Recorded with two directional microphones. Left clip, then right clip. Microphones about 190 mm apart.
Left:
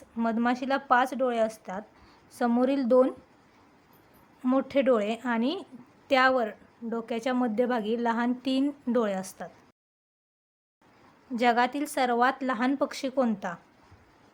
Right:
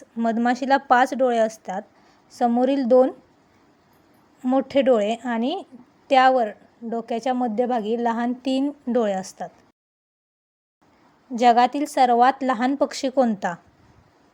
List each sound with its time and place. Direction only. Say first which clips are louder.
0.2 s a woman's voice: right 6 dB; 20° right (ahead or behind)
4.4 s a woman's voice: right 6 dB; 20° right (ahead or behind)
11.3 s a woman's voice: right 8 dB; 20° right (ahead or behind)